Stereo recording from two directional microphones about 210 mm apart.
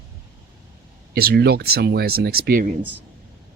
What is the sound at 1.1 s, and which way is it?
Speech, 45° right (ahead or behind).